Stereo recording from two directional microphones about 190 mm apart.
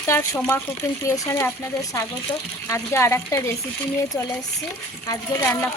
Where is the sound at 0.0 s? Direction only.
15° left (ahead or behind).